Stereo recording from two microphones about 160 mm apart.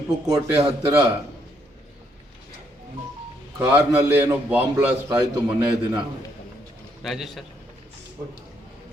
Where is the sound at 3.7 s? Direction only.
10° right (ahead or behind).